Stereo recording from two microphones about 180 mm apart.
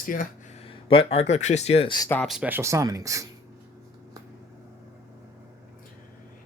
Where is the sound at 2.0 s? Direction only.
10° left (ahead or behind).